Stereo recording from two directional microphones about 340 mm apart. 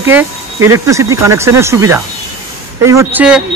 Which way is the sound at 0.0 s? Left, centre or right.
Centre.